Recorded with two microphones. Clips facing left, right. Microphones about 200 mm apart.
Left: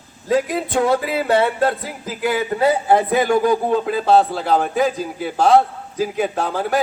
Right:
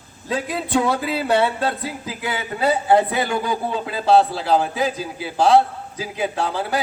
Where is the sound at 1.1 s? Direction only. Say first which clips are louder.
Left 2 dB; 50° left (ahead or behind).